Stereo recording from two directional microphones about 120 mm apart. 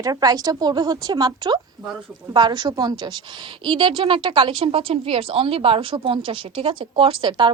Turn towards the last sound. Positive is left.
turn(degrees=-40)  # may be behind; listen again after turning